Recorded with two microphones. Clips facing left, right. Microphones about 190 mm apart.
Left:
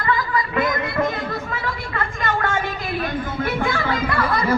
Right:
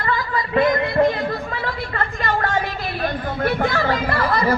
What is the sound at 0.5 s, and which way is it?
Music, 35° right (ahead or behind).